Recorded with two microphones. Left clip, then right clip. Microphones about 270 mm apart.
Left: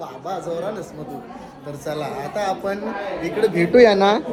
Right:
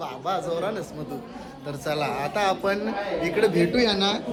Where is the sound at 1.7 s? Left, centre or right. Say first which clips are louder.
Even; centre.